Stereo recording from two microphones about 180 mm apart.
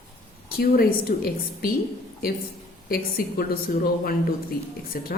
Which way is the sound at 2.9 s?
55° left (ahead or behind).